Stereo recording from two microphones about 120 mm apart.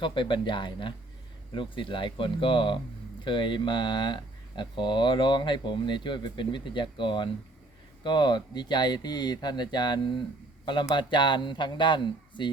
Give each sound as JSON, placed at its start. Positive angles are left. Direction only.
{"t": 0.0, "sound": "speech", "side_deg": 40}